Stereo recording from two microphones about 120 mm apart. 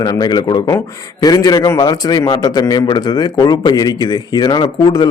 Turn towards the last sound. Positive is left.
turn(degrees=40)  # may be behind; listen again after turning